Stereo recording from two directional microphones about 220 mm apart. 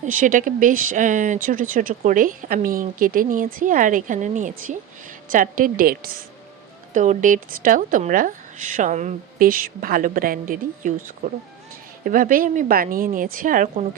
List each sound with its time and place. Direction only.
0.0 s speech: 35° right (ahead or behind)
12.0 s speech: 40° right (ahead or behind)